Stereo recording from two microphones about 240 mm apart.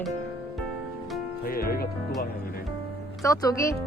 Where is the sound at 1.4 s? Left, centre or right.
Left.